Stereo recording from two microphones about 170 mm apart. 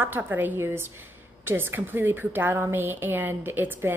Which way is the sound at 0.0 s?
10° right (ahead or behind).